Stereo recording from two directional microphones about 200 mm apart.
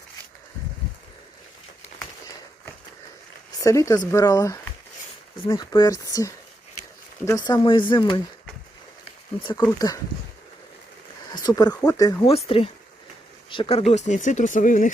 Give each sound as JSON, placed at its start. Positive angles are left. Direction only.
{"t": 3.6, "sound": "speech", "side_deg": 15}
{"t": 7.3, "sound": "speech", "side_deg": 20}
{"t": 9.4, "sound": "speech", "side_deg": 25}
{"t": 11.4, "sound": "speech", "side_deg": 20}
{"t": 12.3, "sound": "speech", "side_deg": 30}